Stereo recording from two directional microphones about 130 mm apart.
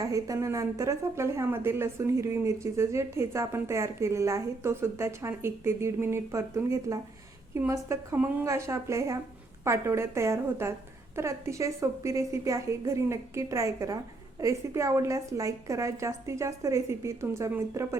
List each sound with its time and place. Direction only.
0.0 s a woman's voice: 25° right (ahead or behind)